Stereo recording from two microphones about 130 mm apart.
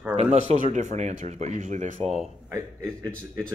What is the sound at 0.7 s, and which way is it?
Speech, 65° right (ahead or behind).